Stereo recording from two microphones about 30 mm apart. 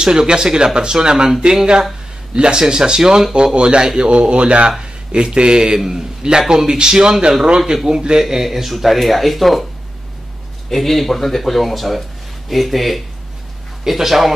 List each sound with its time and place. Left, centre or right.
0.0 s speech: right
2.3 s speech: right
3.5 s a man's voice: right; by 9.7 s centre
10.7 s speech: centre